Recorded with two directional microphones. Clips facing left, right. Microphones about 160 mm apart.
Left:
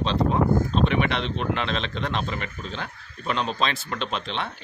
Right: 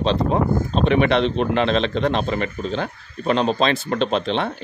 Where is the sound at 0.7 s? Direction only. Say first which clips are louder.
Right 6 dB; 30° right (ahead or behind).